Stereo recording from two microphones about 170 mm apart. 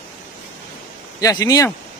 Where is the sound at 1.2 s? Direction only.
20° left (ahead or behind).